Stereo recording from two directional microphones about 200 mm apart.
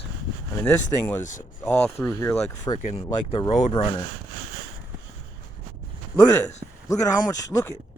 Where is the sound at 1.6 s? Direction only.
10° left (ahead or behind).